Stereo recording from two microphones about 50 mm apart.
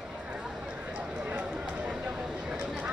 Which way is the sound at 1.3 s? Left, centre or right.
Right.